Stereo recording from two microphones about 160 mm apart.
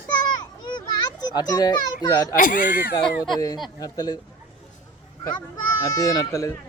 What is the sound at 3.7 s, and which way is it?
Speech, 25° left (ahead or behind).